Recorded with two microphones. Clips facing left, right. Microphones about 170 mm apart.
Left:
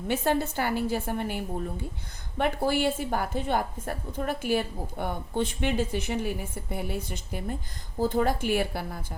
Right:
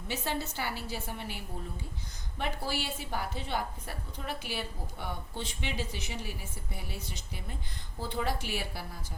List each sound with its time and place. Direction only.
0.1 s a woman's voice: 55° left (ahead or behind)